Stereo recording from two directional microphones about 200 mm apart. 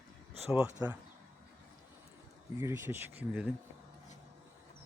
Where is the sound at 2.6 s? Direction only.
10° right (ahead or behind).